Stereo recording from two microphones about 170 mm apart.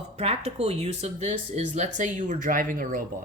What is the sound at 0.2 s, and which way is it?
Speech, 35° right (ahead or behind).